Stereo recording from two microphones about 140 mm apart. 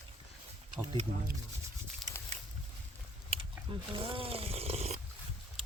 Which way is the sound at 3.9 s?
40° right (ahead or behind).